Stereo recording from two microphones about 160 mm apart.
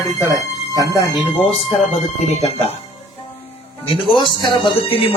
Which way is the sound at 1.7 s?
40° left (ahead or behind).